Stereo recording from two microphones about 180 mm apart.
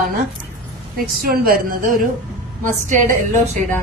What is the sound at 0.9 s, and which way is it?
A woman's voice, 55° right (ahead or behind).